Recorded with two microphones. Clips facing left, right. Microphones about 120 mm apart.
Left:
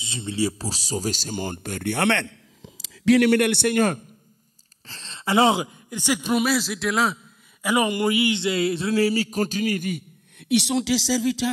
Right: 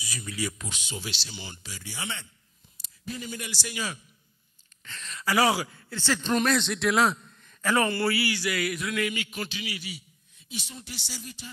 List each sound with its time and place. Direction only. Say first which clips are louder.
0.0 s speech: left 8 dB; 25° left (ahead or behind); by 4.0 s 55° left (ahead or behind)
4.8 s a man's voice: left 3 dB; 30° left (ahead or behind); by 7.2 s centre (ahead or behind)
7.6 s a man's voice: left 3 dB; 15° left (ahead or behind); by 11.5 s 90° left